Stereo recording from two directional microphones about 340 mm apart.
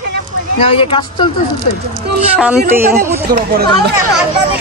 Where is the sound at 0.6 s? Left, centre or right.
Centre.